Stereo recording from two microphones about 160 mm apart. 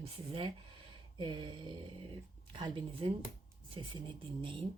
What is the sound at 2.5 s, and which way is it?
Speech, 35° right (ahead or behind).